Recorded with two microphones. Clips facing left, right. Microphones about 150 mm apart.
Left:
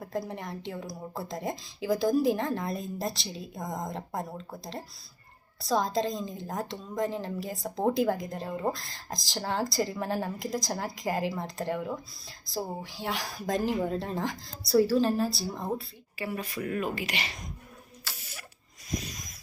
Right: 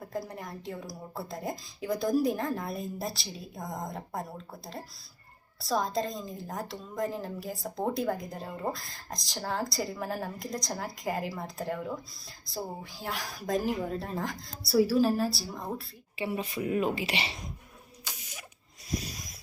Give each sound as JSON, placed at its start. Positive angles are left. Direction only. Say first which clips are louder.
{"t": 0.0, "sound": "a woman's voice", "louder": "left 3 dB", "side_deg": 0}
{"t": 16.1, "sound": "speech", "louder": "right 2 dB", "side_deg": -25}